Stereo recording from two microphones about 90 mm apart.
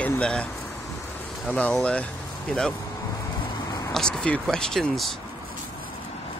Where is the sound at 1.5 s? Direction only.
10° left (ahead or behind).